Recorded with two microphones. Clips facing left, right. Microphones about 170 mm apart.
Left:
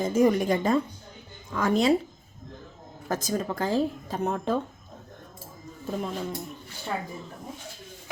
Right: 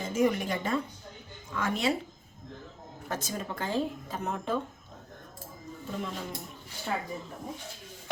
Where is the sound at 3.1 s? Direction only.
40° left (ahead or behind).